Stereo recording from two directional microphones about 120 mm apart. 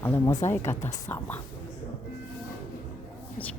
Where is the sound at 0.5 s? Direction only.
20° left (ahead or behind).